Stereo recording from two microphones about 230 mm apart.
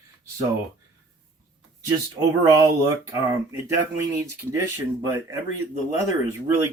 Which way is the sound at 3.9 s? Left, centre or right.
Centre.